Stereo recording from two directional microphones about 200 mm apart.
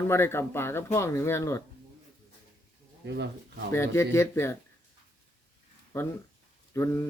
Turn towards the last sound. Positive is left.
turn(degrees=15)  # may be behind; listen again after turning